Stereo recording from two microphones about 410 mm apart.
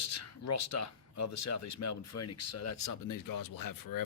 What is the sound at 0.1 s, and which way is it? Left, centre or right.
Speech, left.